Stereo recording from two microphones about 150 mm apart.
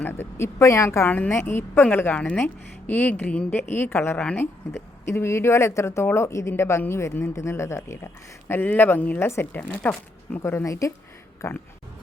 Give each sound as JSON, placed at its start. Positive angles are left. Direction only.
{"t": 0.0, "sound": "a woman's voice", "side_deg": 15}